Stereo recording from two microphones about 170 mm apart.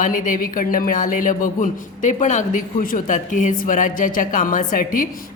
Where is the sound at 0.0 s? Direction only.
50° left (ahead or behind).